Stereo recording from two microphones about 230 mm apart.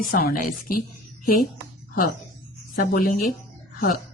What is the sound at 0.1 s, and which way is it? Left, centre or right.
Speech, left.